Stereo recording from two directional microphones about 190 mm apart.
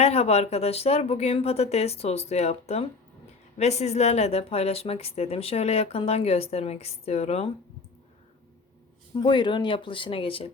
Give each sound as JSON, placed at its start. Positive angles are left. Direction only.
{"t": 0.0, "sound": "speech", "side_deg": 35}
{"t": 9.2, "sound": "speech", "side_deg": 25}